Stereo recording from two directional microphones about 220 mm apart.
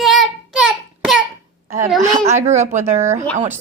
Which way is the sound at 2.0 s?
35° right (ahead or behind).